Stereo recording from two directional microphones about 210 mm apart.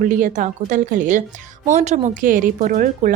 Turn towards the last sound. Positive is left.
turn(degrees=-40)  # may be behind; listen again after turning